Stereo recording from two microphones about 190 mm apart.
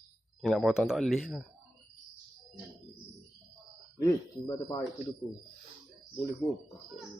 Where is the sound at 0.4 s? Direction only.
Centre (ahead or behind).